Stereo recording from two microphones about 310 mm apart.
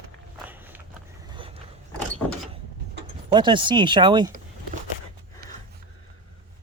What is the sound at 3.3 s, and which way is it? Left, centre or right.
Speech, centre.